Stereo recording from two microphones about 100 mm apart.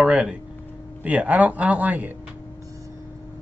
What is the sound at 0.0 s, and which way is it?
Speech, 5° right (ahead or behind).